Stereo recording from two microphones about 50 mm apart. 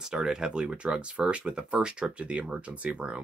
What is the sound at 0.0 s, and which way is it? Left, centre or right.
Speech, centre.